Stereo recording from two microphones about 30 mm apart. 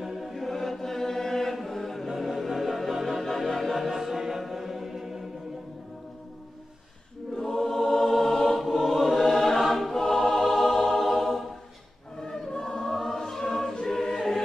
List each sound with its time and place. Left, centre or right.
0.0 s choir: centre
0.4 s choir: centre
1.6 s chant: centre
2.0 s music: centre
3.3 s choir: centre
3.9 s music: centre
7.3 s choir: centre
7.6 s music: centre
8.0 s choir: centre
12.2 s choir: centre
12.7 s choir: centre